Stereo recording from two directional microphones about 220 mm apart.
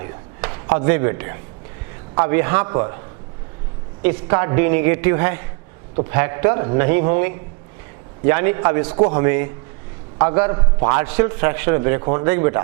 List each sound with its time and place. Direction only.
0.0 s a sound: 15° right (ahead or behind)
0.8 s a man's voice: 25° right (ahead or behind)
4.0 s a man's voice: 20° right (ahead or behind)
8.3 s a man's voice: 20° right (ahead or behind)
11.0 s a man's voice: 15° right (ahead or behind)